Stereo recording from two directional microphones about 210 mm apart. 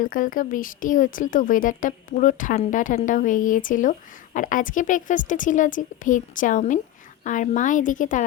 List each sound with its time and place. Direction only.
0.0 s speech: 40° left (ahead or behind)